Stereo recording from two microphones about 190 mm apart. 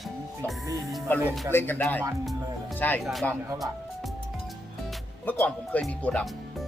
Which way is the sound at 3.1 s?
Centre (ahead or behind).